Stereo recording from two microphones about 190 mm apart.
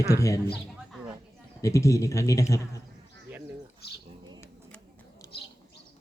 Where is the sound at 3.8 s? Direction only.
55° left (ahead or behind).